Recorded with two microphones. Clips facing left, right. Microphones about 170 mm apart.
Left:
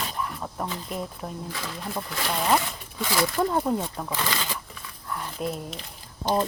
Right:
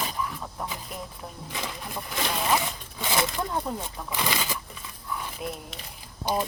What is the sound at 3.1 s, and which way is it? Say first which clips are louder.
Speech: left 3 dB; 20° right (ahead or behind).